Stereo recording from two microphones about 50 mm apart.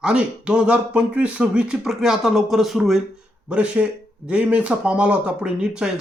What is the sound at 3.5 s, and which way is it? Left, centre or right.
Speech, right.